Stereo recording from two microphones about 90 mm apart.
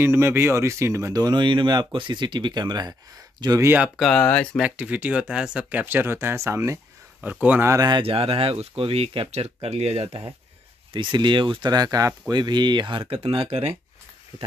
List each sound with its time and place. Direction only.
0.0 s speech: 30° right (ahead or behind); by 3.6 s 45° right (ahead or behind)
3.6 s speech: 20° right (ahead or behind)
4.1 s speech: 15° left (ahead or behind)
4.6 s speech: 10° right (ahead or behind); by 6.8 s 35° right (ahead or behind)
7.2 s speech: 20° right (ahead or behind)
8.0 s speech: 90° right
10.9 s speech: 60° right (ahead or behind)
11.7 s speech: 45° right (ahead or behind)
12.4 s speech: 55° right (ahead or behind)
13.1 s speech: 90° right